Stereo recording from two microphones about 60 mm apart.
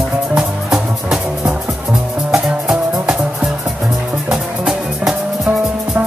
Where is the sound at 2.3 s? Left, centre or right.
Centre.